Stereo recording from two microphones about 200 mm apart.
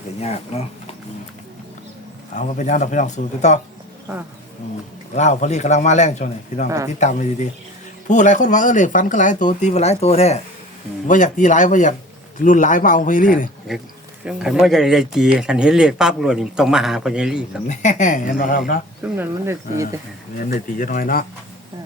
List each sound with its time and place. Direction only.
0.2 s speech: 30° left (ahead or behind)
2.3 s speech: 35° left (ahead or behind)
5.1 s speech: 35° left (ahead or behind)
6.7 s speech: 15° right (ahead or behind)
7.0 s speech: 35° left (ahead or behind)
13.7 s speech: centre (ahead or behind)
17.7 s speech: 35° left (ahead or behind)
19.0 s speech: 10° right (ahead or behind)
20.4 s speech: 45° left (ahead or behind)